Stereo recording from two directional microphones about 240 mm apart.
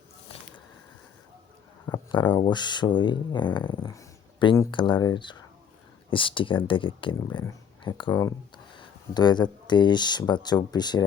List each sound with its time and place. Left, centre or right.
1.9 s speech: centre